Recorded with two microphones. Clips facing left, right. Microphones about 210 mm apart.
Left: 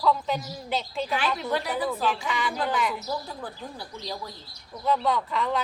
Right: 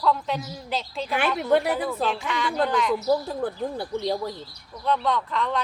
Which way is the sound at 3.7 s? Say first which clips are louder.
Right 10 dB; 55° right (ahead or behind).